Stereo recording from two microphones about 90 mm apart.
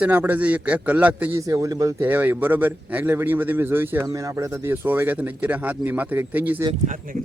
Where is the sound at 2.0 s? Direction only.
20° right (ahead or behind).